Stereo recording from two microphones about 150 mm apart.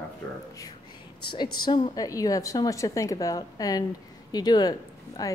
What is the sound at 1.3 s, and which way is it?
A woman's voice, 30° left (ahead or behind).